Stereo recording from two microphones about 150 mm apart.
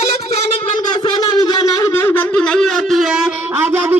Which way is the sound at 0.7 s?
30° left (ahead or behind).